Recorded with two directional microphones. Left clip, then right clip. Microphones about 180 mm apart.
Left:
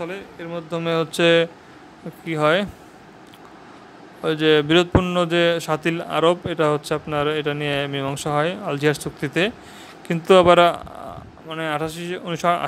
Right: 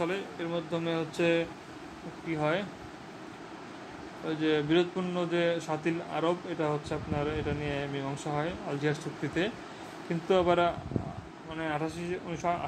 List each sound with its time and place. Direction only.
0.0 s speech: 10° left (ahead or behind)
0.7 s speech: 40° left (ahead or behind)
4.2 s speech: 40° left (ahead or behind)